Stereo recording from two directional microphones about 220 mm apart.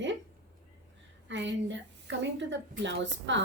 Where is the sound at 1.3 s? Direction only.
55° right (ahead or behind).